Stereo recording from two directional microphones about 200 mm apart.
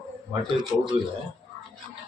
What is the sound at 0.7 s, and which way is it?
Speech, 10° right (ahead or behind).